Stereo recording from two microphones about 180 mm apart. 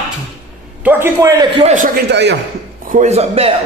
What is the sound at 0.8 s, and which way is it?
Speech, 15° right (ahead or behind).